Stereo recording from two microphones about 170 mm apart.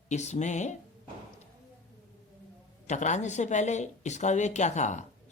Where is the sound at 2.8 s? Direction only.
45° left (ahead or behind).